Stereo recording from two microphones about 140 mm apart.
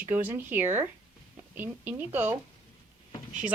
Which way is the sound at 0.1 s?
15° right (ahead or behind).